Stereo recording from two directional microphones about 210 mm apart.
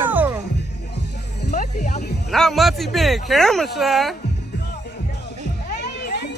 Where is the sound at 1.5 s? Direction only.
35° left (ahead or behind).